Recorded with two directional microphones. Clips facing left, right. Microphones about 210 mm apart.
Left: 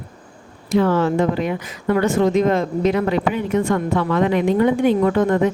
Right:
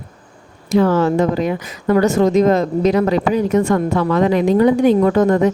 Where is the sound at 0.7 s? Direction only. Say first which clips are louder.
Right 3 dB; 40° right (ahead or behind).